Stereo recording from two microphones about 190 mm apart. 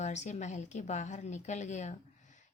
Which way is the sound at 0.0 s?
40° left (ahead or behind).